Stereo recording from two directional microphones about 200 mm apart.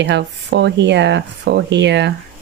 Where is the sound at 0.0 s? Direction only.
60° right (ahead or behind).